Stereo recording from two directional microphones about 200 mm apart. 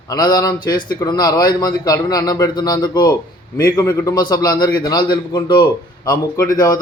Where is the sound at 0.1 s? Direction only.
20° left (ahead or behind).